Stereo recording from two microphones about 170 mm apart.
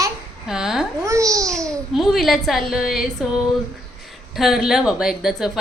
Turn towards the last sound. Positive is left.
turn(degrees=0)  # may be behind; listen again after turning